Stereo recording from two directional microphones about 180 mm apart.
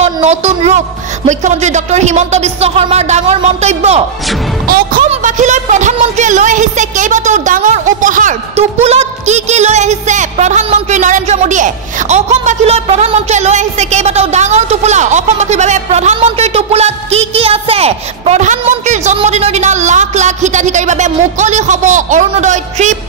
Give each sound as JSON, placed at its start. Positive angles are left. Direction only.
{"t": 0.0, "sound": "a woman's voice", "side_deg": -35}
{"t": 4.6, "sound": "music", "side_deg": -55}
{"t": 5.1, "sound": "speech", "side_deg": -40}